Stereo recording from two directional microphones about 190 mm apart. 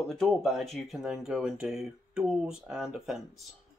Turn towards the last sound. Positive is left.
turn(degrees=0)  # may be behind; listen again after turning